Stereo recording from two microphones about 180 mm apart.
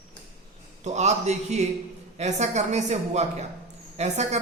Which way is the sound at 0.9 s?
40° right (ahead or behind).